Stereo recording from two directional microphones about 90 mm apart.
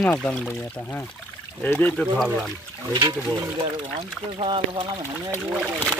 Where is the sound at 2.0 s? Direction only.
Centre (ahead or behind).